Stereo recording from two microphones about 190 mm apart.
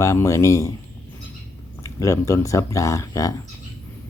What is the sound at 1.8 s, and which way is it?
Speech, 15° left (ahead or behind).